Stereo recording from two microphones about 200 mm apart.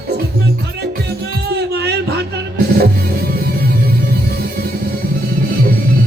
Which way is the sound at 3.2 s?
50° right (ahead or behind).